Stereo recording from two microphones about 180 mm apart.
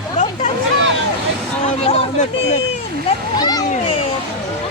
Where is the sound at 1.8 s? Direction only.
35° left (ahead or behind).